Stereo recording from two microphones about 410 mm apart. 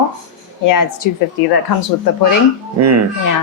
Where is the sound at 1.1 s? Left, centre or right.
Left.